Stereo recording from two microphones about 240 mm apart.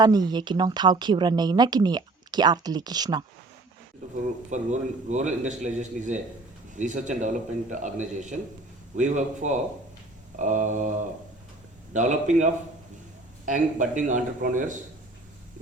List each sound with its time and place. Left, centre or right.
0.0 s speech: centre
4.4 s a man's voice: right
11.9 s a man's voice: right